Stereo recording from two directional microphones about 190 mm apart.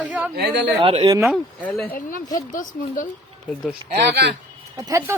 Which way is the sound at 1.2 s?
Centre (ahead or behind).